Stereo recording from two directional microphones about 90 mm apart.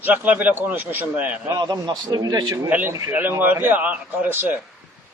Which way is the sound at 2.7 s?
20° right (ahead or behind).